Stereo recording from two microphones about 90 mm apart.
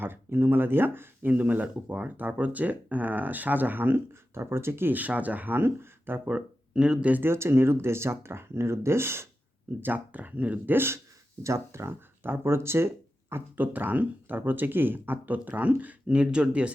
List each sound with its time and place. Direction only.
0.0 s speech: 25° right (ahead or behind)
6.2 s speech: 10° right (ahead or behind)